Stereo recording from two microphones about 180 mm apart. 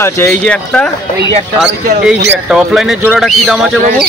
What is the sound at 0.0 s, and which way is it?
Speech, 15° left (ahead or behind).